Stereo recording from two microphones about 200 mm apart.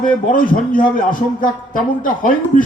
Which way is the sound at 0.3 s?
40° left (ahead or behind).